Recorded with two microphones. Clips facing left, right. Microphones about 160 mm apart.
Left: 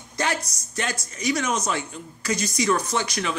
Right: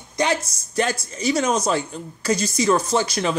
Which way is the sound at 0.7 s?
35° right (ahead or behind).